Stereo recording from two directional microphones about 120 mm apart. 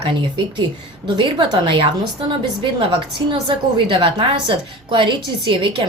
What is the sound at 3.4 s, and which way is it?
A woman's voice, 45° right (ahead or behind).